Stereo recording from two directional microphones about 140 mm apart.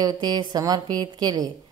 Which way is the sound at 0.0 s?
30° right (ahead or behind).